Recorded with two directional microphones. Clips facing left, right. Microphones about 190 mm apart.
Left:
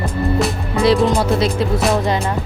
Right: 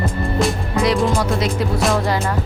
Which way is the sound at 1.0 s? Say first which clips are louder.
Left 3 dB; 25° left (ahead or behind).